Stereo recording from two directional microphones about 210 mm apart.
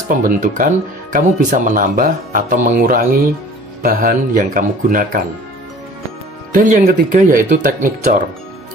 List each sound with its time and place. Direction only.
0.1 s speech: 40° right (ahead or behind)
6.5 s speech: 40° right (ahead or behind)